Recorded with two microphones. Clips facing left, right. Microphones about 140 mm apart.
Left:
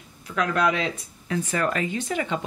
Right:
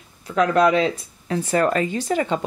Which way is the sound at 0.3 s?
30° right (ahead or behind).